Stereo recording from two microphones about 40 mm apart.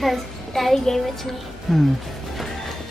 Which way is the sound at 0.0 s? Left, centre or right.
Centre.